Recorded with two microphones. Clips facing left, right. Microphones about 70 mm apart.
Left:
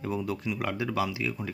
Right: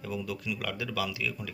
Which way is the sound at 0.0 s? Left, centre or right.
Left.